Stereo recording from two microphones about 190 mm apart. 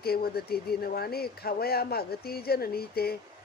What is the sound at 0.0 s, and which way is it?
Speech, 55° left (ahead or behind).